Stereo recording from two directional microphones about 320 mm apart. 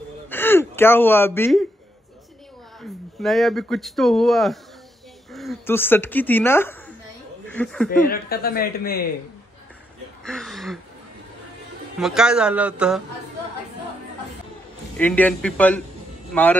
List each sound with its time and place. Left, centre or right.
0.3 s gasp: centre
2.8 s speech: centre
8.1 s a woman's voice: left
10.2 s speech: centre
12.0 s speech: centre
15.0 s speech: centre